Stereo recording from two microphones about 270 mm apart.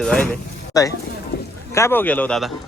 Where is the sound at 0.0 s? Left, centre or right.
Centre.